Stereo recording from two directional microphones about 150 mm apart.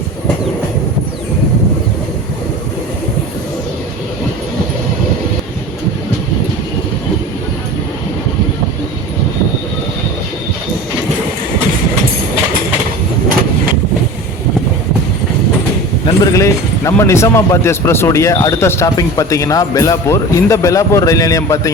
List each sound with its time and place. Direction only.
16.2 s speech: 20° left (ahead or behind)